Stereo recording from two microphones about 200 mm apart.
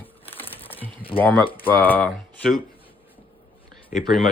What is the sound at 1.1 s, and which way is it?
Speech, 10° left (ahead or behind).